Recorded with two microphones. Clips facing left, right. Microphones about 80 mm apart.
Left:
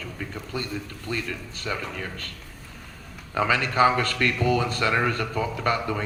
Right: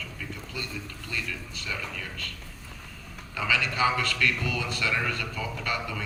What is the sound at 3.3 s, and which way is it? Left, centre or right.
Speech, left.